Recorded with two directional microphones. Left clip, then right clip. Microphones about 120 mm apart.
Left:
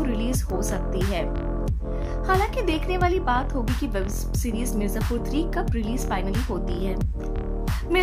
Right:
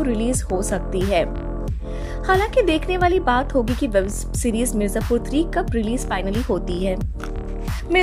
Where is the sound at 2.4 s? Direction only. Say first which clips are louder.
Right 7 dB; 50° right (ahead or behind).